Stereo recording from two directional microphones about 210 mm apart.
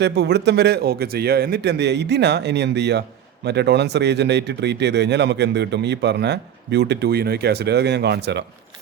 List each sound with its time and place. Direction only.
0.0 s speech: 55° right (ahead or behind)